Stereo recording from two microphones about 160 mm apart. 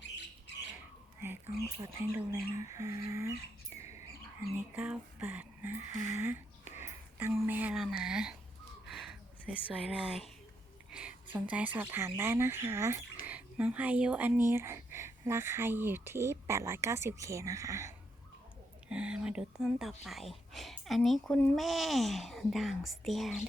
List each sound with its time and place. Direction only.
1.2 s speech: 15° right (ahead or behind)
2.6 s a sound: 20° right (ahead or behind)
4.5 s speech: 10° right (ahead or behind)
8.9 s a sound: centre (ahead or behind)
10.9 s speech: 5° right (ahead or behind)
18.9 s speech: 5° right (ahead or behind)